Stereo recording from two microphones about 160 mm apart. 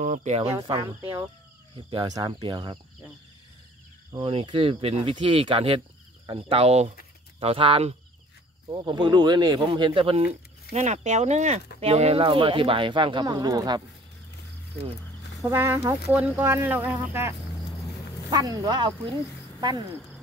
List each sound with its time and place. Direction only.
0.0 s speech: 50° right (ahead or behind)
0.6 s speech: 20° right (ahead or behind)
4.2 s speech: 35° right (ahead or behind)
10.7 s speech: 45° right (ahead or behind); by 13.8 s 25° right (ahead or behind)
15.5 s speech: 15° right (ahead or behind); by 19.1 s 30° right (ahead or behind)